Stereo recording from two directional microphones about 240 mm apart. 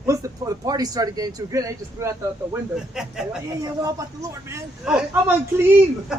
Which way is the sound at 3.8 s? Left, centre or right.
Centre.